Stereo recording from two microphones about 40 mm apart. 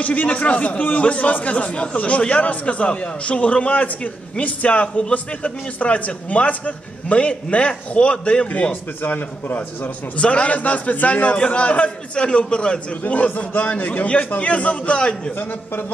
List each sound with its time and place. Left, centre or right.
0.0 s a man's voice: left
9.0 s a man's voice: left
10.1 s a man's voice: left
13.0 s a man's voice: left
13.5 s a man's voice: left